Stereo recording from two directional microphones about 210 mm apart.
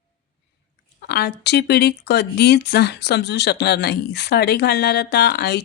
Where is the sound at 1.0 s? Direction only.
50° left (ahead or behind).